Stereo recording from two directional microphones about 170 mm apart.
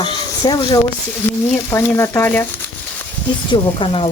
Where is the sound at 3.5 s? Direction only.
30° left (ahead or behind).